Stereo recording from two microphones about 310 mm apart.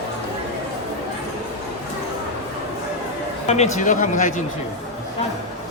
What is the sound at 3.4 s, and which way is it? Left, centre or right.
Speech, left.